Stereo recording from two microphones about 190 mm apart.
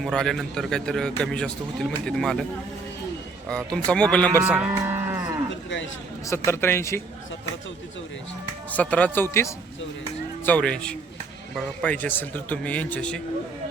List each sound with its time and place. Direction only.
0.0 s a man's voice: 5° left (ahead or behind)
3.8 s a man's voice: 5° left (ahead or behind)
4.3 s moo: 10° right (ahead or behind)
5.6 s a sound: 75° left (ahead or behind)
6.2 s a man's voice: 15° left (ahead or behind)
8.7 s a man's voice: 10° left (ahead or behind)